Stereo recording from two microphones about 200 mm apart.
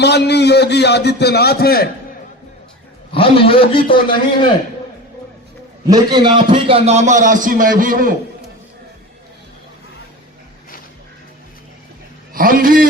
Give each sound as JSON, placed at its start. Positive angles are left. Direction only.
{"t": 0.0, "sound": "a man's voice", "side_deg": 55}
{"t": 3.1, "sound": "a man's voice", "side_deg": 25}
{"t": 5.9, "sound": "a man's voice", "side_deg": -20}
{"t": 12.3, "sound": "a man's voice", "side_deg": -45}